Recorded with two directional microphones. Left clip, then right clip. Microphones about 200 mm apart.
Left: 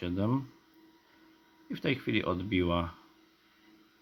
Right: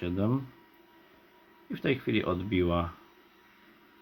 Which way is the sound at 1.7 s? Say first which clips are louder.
Right 2 dB; 20° left (ahead or behind).